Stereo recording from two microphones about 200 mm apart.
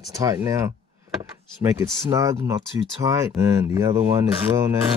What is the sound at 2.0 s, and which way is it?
Speech, 15° right (ahead or behind).